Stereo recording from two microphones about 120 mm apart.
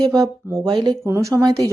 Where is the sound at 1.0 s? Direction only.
25° right (ahead or behind).